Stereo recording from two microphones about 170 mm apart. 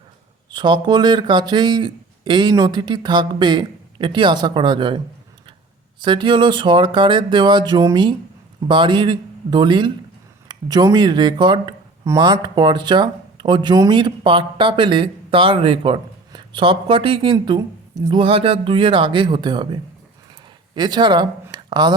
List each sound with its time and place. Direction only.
0.5 s speech: 25° right (ahead or behind)
6.0 s speech: 25° right (ahead or behind)
21.5 s a sound: 25° right (ahead or behind)